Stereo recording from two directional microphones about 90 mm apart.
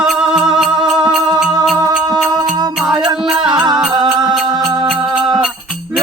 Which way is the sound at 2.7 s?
5° right (ahead or behind).